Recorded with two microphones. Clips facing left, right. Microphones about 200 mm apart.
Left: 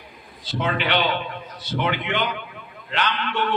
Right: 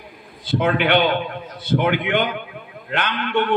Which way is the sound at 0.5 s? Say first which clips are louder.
Right 6 dB; 55° right (ahead or behind).